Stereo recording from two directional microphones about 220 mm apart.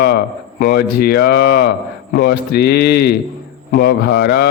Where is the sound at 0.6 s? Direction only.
45° left (ahead or behind).